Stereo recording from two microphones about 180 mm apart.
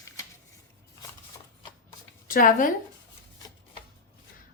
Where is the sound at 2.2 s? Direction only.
50° left (ahead or behind).